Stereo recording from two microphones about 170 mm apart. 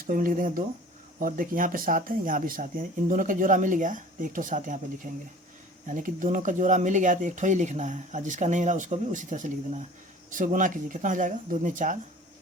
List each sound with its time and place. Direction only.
0.1 s speech: 55° right (ahead or behind)